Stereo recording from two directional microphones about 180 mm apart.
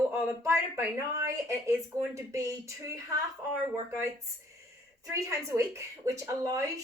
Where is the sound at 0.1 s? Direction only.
15° right (ahead or behind).